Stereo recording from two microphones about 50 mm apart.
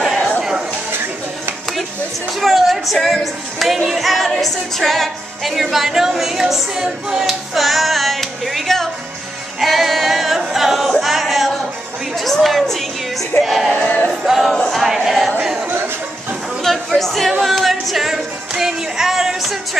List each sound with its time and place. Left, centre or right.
0.4 s a sound: centre
2.4 s speech: centre
9.6 s singing: centre
12.2 s music: centre
13.4 s speech: centre
13.8 s music: left
14.2 s music: centre
14.7 s choir: centre
16.6 s a sound: centre
17.4 s music: centre